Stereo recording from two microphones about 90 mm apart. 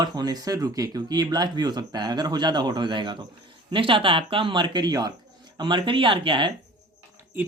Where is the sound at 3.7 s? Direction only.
75° right (ahead or behind); by 5.1 s 50° right (ahead or behind).